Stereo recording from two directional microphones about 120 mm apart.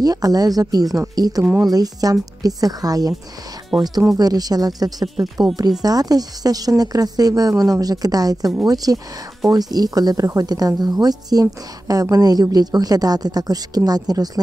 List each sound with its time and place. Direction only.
0.0 s speech: 30° right (ahead or behind)